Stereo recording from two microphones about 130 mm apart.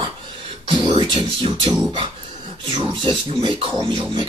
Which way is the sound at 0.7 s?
40° right (ahead or behind).